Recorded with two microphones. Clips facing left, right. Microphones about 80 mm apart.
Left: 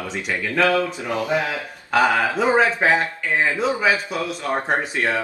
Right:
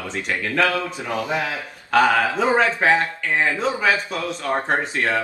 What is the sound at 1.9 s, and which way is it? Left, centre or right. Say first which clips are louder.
A man's voice: right 1 dB; centre.